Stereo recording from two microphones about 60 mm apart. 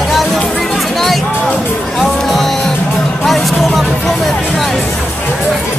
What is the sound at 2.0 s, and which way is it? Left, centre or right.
Music, centre.